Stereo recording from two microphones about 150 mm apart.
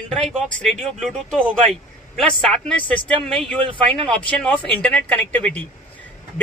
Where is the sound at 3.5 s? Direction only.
35° right (ahead or behind).